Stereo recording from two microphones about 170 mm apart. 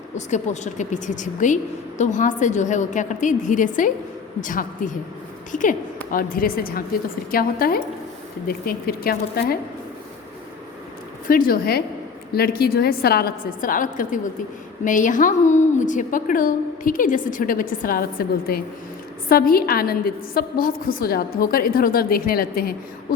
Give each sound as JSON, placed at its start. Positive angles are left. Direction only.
{"t": 0.3, "sound": "a woman's voice", "side_deg": 45}
{"t": 11.3, "sound": "a woman's voice", "side_deg": 55}